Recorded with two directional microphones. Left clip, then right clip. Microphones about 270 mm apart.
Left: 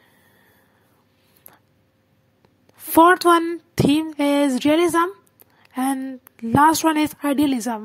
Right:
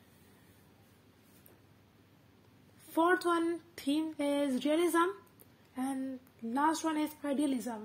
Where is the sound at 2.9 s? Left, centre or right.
Left.